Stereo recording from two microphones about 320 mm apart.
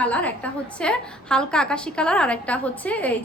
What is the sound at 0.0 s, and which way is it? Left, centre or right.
A woman's voice, centre.